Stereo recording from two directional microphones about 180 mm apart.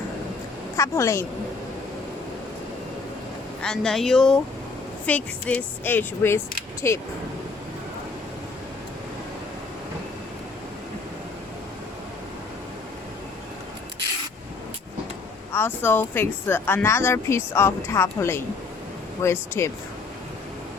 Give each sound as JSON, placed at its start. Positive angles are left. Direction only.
{"t": 0.8, "sound": "speech", "side_deg": 15}
{"t": 3.6, "sound": "speech", "side_deg": 5}
{"t": 15.5, "sound": "speech", "side_deg": 10}